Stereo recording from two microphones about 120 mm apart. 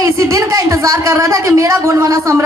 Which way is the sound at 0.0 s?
30° right (ahead or behind).